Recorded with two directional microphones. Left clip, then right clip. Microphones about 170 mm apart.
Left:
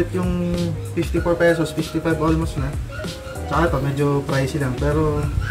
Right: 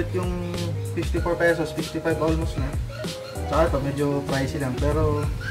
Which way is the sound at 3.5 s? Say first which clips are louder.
Left 2 dB; centre (ahead or behind).